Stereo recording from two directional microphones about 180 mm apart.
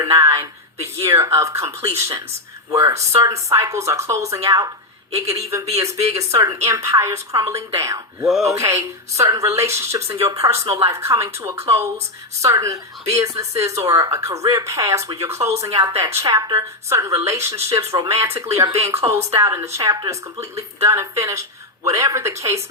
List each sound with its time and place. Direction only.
0.0 s a woman's voice: 15° right (ahead or behind)
8.3 s speech: centre (ahead or behind)
8.5 s a woman's voice: 15° right (ahead or behind)
15.7 s a woman's voice: 30° right (ahead or behind)
16.0 s a woman's voice: 15° right (ahead or behind)